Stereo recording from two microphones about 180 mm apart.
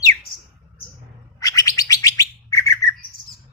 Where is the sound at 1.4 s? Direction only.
20° left (ahead or behind).